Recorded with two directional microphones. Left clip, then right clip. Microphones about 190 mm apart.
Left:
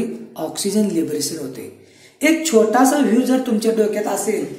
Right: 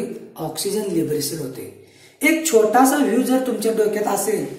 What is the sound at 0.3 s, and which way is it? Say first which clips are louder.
Speech: left 1 dB; 45° left (ahead or behind).